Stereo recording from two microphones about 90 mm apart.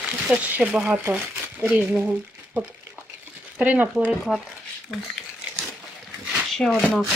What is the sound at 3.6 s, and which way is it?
Speech, 15° right (ahead or behind).